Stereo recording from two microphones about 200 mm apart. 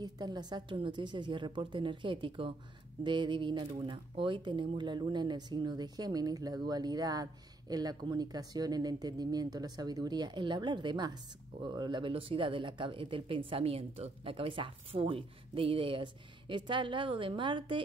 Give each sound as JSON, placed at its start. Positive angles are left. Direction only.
{"t": 0.0, "sound": "speech", "side_deg": -20}